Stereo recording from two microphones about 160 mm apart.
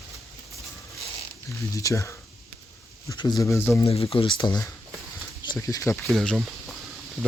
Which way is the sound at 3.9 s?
35° left (ahead or behind).